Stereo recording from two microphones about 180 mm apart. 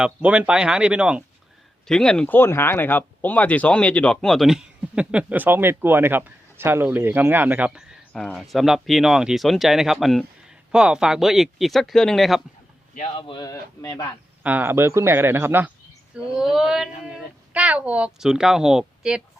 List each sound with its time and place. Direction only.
0.0 s speech: 5° right (ahead or behind)
12.9 s a man's voice: 35° left (ahead or behind); by 14.2 s 15° left (ahead or behind)
14.4 s speech: 10° right (ahead or behind)